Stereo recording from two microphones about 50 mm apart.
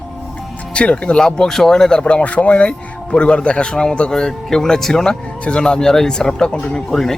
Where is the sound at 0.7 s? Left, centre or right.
Left.